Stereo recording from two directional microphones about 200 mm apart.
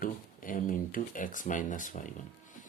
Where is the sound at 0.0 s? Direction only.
40° left (ahead or behind).